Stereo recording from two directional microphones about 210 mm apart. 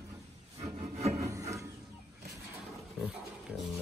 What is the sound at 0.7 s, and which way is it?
Rub, 30° right (ahead or behind).